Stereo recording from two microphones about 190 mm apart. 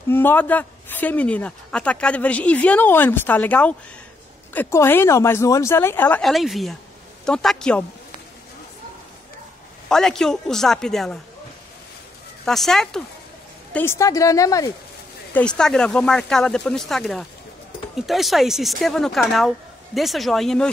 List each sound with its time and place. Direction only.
0.1 s a woman's voice: 10° left (ahead or behind)
9.8 s speech: 5° left (ahead or behind)
12.4 s speech: centre (ahead or behind)
13.7 s a woman's voice: 15° left (ahead or behind)
15.3 s speech: 5° left (ahead or behind)